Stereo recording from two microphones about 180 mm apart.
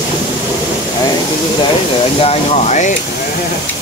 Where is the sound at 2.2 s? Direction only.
35° left (ahead or behind).